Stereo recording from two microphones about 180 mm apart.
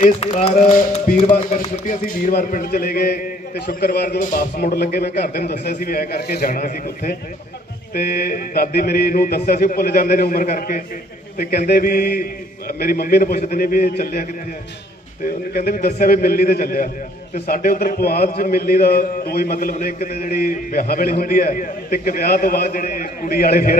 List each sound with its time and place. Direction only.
0.2 s a man's voice: 35° left (ahead or behind); by 4.3 s 65° left (ahead or behind)
4.3 s speech: 50° left (ahead or behind)
15.5 s a man's voice: 55° left (ahead or behind)